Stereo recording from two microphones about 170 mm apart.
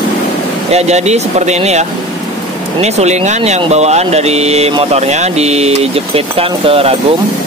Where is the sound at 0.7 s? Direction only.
40° right (ahead or behind).